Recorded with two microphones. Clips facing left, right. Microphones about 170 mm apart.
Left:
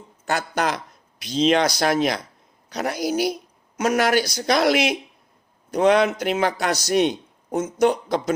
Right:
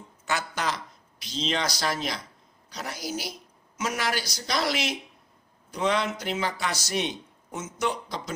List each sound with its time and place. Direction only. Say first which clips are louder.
0.3 s speech: left 6 dB; 60° left (ahead or behind)